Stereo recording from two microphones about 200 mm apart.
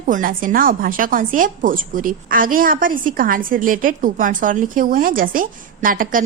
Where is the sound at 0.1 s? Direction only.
45° right (ahead or behind).